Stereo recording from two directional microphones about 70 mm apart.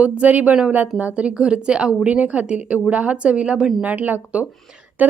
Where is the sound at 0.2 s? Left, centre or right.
Right.